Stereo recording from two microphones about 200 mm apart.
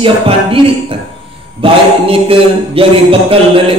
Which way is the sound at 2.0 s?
25° right (ahead or behind).